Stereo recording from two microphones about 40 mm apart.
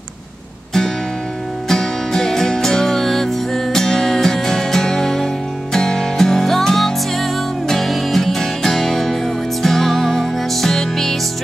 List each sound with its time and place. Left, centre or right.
1.7 s music: centre